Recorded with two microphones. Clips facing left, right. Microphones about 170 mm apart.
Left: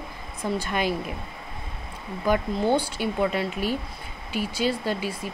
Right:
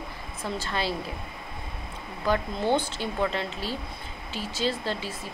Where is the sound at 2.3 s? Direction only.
10° left (ahead or behind).